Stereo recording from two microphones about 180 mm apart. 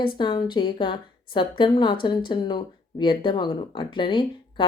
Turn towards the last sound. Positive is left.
turn(degrees=25)  # may be behind; listen again after turning